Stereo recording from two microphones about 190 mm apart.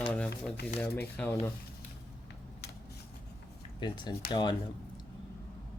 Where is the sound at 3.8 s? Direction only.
25° left (ahead or behind).